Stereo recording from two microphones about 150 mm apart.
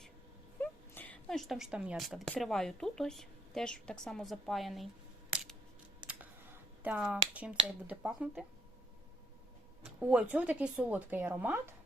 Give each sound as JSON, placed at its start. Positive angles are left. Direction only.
{"t": 0.6, "sound": "a sound", "side_deg": 10}
{"t": 2.3, "sound": "a woman's voice", "side_deg": 5}
{"t": 6.1, "sound": "speech", "side_deg": -10}
{"t": 10.0, "sound": "speech", "side_deg": -10}